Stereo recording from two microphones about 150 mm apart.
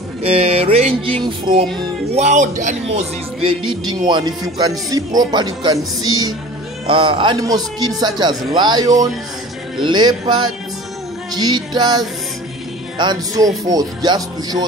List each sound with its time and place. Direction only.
0.2 s music: 40° right (ahead or behind)
2.1 s speech: 55° right (ahead or behind)
3.4 s a man's voice: 30° right (ahead or behind)